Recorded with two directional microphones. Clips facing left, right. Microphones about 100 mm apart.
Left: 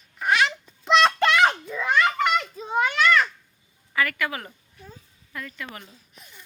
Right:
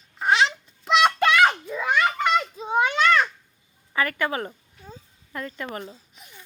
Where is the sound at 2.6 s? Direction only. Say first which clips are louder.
Right 1 dB; 20° right (ahead or behind); by 6.0 s 35° right (ahead or behind).